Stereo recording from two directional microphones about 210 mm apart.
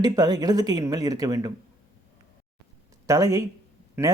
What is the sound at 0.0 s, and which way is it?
Speech, 20° right (ahead or behind).